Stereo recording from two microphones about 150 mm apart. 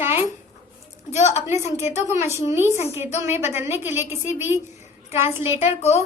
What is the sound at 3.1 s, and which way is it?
Speech, 50° left (ahead or behind).